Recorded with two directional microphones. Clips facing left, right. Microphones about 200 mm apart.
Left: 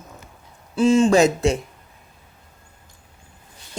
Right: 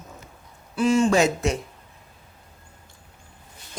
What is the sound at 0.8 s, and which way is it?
Speech, 25° left (ahead or behind).